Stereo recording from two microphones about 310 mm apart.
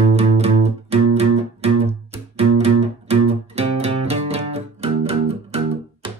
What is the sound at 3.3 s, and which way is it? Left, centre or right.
Music, centre.